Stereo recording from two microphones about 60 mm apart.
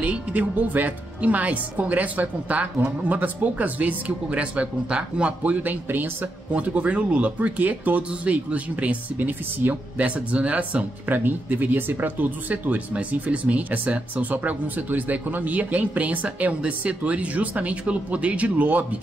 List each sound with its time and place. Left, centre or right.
0.0 s speech: right